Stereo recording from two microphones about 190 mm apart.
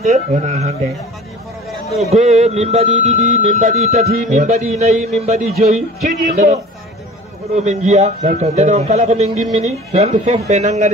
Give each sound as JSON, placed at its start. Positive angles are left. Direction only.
{"t": 0.0, "sound": "speech", "side_deg": -35}
{"t": 2.0, "sound": "speech", "side_deg": -35}